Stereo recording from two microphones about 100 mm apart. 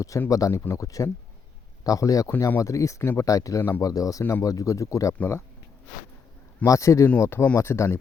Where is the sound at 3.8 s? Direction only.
35° left (ahead or behind).